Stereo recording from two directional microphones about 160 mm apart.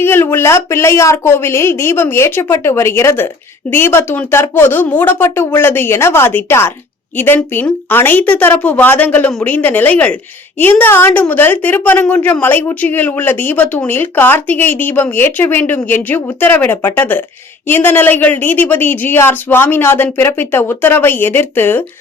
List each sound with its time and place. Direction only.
0.0 s a woman's voice: 15° left (ahead or behind)